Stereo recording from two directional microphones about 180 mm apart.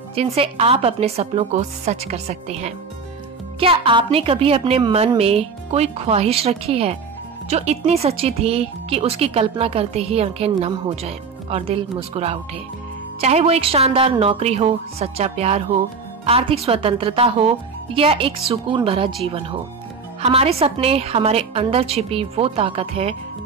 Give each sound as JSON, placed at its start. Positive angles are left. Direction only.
{"t": 0.1, "sound": "a woman's voice", "side_deg": -30}